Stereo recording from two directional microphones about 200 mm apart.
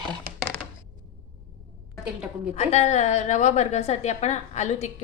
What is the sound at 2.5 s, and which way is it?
A woman's voice, 35° left (ahead or behind).